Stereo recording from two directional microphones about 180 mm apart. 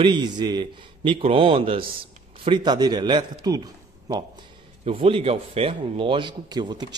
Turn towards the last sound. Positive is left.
turn(degrees=-25)  # may be behind; listen again after turning